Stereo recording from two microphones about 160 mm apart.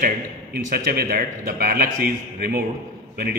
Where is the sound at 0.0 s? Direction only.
70° right (ahead or behind).